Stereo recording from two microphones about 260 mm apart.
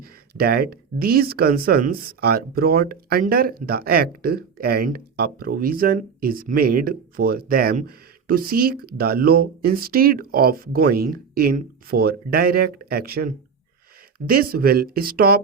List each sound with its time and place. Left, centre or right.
0.0 s speech: right